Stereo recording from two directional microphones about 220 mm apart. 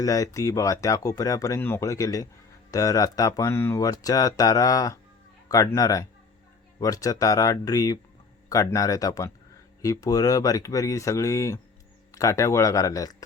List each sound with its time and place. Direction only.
0.0 s speech: 15° left (ahead or behind)